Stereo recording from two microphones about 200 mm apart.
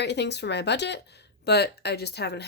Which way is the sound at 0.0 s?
55° left (ahead or behind).